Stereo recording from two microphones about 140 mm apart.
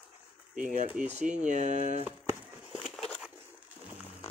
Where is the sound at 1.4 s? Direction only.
60° right (ahead or behind).